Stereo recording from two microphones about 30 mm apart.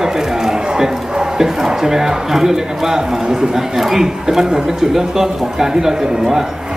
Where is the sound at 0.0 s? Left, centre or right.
Centre.